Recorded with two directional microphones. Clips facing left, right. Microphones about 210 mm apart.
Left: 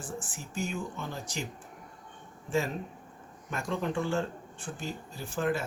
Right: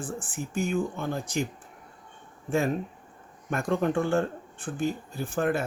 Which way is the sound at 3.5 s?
55° right (ahead or behind).